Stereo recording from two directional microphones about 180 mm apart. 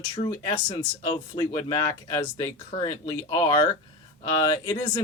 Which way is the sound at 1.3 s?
20° left (ahead or behind).